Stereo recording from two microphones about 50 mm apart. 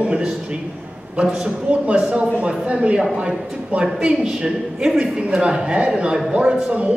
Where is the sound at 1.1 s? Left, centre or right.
Right.